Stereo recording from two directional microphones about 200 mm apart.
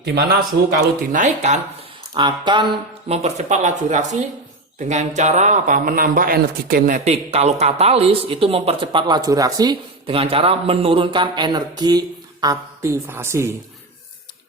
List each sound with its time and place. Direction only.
0.0 s speech: 55° right (ahead or behind)
1.1 s speech: 40° right (ahead or behind)
2.1 s speech: 25° right (ahead or behind)